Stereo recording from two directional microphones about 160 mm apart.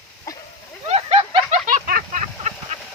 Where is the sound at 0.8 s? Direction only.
35° right (ahead or behind).